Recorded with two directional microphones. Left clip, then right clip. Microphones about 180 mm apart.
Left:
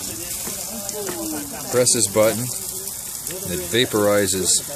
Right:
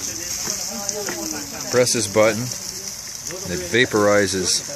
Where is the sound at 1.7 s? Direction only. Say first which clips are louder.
Right 1 dB; 10° right (ahead or behind).